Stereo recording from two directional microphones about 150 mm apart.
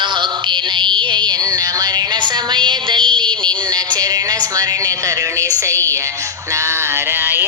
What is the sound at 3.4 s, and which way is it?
Speech, 25° right (ahead or behind).